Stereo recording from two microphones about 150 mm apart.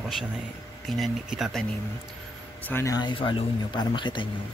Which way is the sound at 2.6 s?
20° left (ahead or behind).